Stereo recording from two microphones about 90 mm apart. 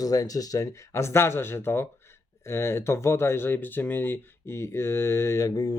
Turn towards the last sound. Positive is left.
turn(degrees=45)  # may be behind; listen again after turning